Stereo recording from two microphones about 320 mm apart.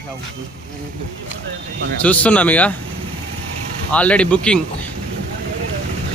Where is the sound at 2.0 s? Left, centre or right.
Centre.